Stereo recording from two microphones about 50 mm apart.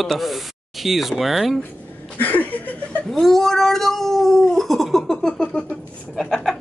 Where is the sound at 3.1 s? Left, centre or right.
Centre.